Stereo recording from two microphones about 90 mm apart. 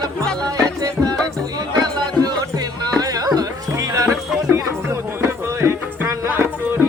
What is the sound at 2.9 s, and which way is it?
Music, 45° right (ahead or behind).